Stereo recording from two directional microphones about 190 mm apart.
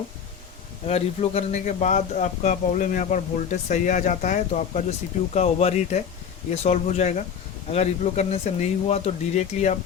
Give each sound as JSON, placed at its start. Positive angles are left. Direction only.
{"t": 0.9, "sound": "a man's voice", "side_deg": 30}